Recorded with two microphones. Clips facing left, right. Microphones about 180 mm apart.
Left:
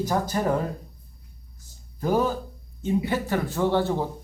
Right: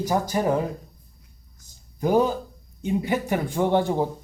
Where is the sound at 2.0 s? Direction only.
15° right (ahead or behind).